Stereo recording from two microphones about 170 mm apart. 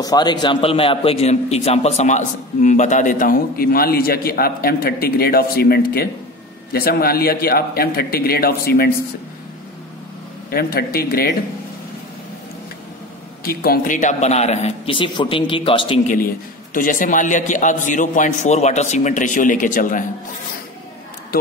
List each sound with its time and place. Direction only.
0.0 s a man's voice: 25° left (ahead or behind); by 8.9 s 65° left (ahead or behind)
10.5 s speech: 65° left (ahead or behind)
13.4 s a man's voice: 60° left (ahead or behind); by 16.0 s 30° left (ahead or behind)
16.1 s a man's voice: 55° left (ahead or behind)